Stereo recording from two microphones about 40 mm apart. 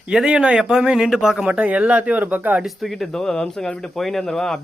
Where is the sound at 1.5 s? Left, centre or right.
Right.